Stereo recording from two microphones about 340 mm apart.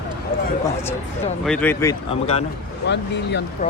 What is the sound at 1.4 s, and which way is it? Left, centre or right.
Speech, centre.